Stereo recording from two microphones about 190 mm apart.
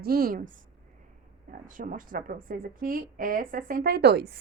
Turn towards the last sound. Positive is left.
turn(degrees=-55)  # may be behind; listen again after turning